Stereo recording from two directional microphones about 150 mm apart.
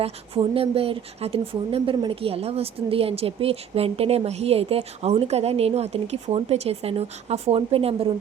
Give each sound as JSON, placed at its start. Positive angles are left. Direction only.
{"t": 0.0, "sound": "speech", "side_deg": -40}